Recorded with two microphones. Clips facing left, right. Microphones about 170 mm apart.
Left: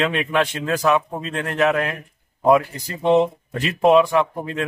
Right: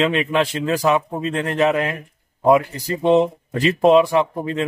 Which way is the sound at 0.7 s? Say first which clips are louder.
Even; 25° right (ahead or behind).